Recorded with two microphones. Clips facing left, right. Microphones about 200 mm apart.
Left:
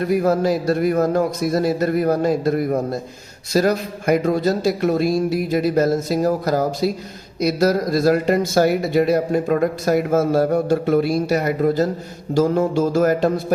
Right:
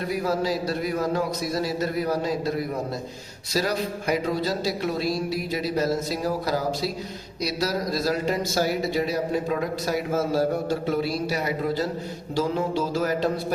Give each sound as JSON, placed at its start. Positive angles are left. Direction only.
{"t": 0.1, "sound": "speech", "side_deg": 55}